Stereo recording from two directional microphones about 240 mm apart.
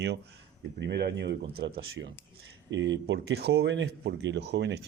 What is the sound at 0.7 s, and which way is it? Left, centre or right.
Speech, right.